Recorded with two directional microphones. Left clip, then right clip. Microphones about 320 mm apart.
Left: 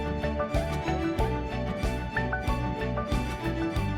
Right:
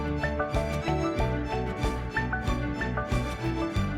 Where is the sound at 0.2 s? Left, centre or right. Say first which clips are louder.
Right 1 dB; centre.